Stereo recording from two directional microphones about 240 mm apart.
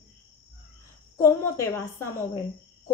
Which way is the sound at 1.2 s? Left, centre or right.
Centre.